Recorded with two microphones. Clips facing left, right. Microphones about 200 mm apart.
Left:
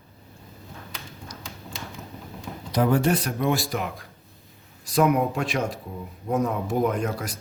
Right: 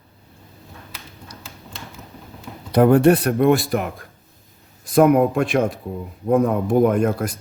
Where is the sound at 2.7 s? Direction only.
60° right (ahead or behind).